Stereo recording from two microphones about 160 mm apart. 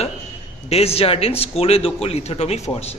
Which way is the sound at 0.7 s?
40° left (ahead or behind).